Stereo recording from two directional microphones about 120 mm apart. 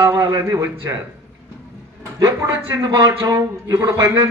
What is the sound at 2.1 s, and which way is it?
Speech, 25° right (ahead or behind).